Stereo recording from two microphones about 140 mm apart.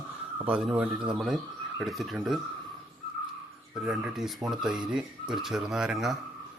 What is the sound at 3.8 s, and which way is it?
Speech, 10° right (ahead or behind).